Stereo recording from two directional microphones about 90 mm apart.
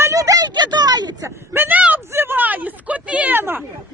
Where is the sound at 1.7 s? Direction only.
15° right (ahead or behind).